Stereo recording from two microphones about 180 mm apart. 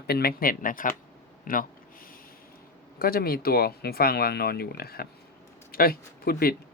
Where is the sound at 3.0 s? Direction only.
55° left (ahead or behind).